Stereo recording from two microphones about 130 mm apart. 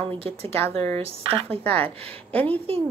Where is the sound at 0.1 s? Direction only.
45° right (ahead or behind).